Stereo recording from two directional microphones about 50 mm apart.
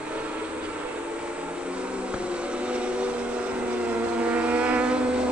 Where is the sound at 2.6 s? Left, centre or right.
Right.